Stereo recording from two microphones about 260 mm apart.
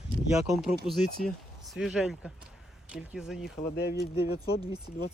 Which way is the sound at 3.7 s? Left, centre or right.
Left.